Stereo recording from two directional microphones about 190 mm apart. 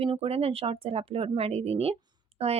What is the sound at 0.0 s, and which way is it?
Speech, 30° right (ahead or behind).